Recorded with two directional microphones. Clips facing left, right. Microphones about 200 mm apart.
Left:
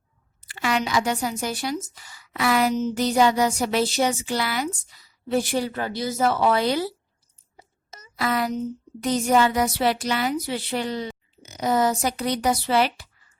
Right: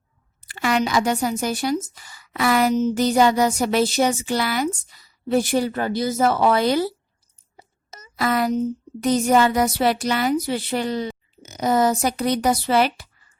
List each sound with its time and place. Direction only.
0.4 s speech: 50° right (ahead or behind)
7.5 s a sound: 45° right (ahead or behind)
9.0 s speech: 45° right (ahead or behind)